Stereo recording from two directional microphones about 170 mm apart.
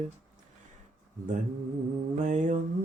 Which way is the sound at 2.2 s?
45° right (ahead or behind).